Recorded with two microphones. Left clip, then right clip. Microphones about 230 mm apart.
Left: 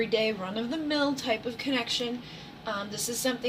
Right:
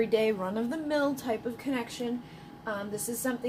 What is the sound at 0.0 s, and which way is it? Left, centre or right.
A woman's voice, right.